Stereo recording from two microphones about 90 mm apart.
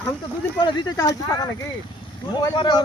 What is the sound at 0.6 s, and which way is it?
Speech, 60° left (ahead or behind).